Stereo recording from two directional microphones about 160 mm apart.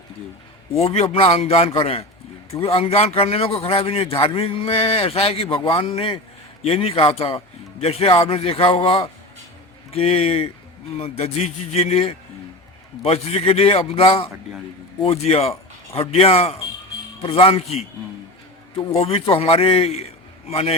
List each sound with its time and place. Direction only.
0.7 s a man's voice: 40° left (ahead or behind)
18.9 s a man's voice: 40° left (ahead or behind)